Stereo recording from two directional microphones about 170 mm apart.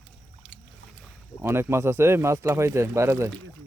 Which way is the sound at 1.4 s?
15° right (ahead or behind).